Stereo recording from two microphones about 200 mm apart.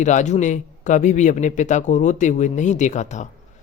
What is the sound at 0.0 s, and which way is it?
A man's voice, 35° left (ahead or behind).